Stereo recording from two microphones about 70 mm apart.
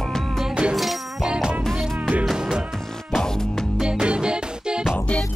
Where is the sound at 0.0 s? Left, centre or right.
Centre.